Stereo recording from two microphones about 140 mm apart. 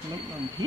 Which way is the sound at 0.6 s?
25° right (ahead or behind).